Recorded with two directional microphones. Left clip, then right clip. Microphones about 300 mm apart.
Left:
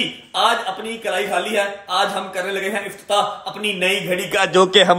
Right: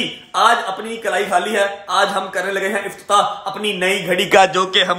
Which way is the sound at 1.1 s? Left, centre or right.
Right.